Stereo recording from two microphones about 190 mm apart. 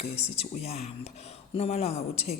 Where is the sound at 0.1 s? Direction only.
35° left (ahead or behind).